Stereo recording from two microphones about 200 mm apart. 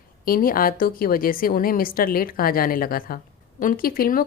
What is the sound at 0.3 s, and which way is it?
A woman's voice, 45° left (ahead or behind).